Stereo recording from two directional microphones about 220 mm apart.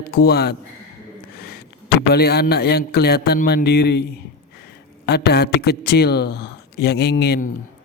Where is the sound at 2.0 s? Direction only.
45° left (ahead or behind).